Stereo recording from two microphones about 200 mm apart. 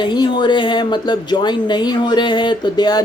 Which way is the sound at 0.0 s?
20° left (ahead or behind).